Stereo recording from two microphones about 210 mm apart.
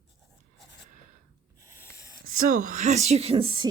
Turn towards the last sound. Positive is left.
turn(degrees=-25)  # may be behind; listen again after turning